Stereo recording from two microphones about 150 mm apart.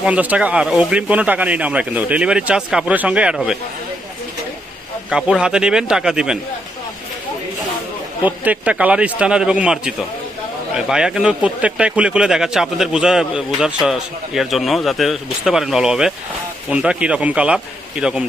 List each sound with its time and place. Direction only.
0.0 s speech: 10° right (ahead or behind)
5.1 s speech: 5° right (ahead or behind)
8.2 s speech: 10° right (ahead or behind)